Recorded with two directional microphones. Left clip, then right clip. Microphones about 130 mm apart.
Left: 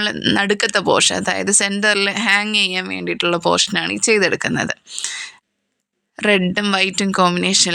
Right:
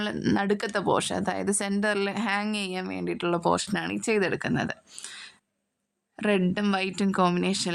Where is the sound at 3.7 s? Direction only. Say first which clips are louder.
Left 10 dB; 30° left (ahead or behind).